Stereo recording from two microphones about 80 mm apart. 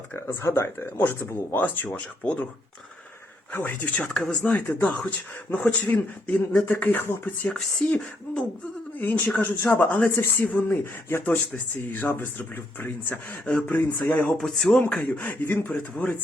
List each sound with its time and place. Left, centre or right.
0.1 s speech: left
3.6 s speech: centre
7.5 s speech: centre
9.0 s speech: left
14.3 s speech: centre